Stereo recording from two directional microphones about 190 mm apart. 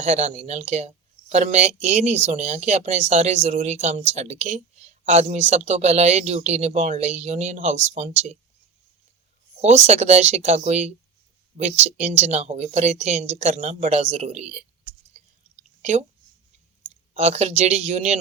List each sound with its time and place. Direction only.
0.0 s speech: 35° right (ahead or behind)
9.6 s speech: 35° right (ahead or behind)
15.8 s speech: 35° right (ahead or behind)
17.2 s speech: 35° right (ahead or behind)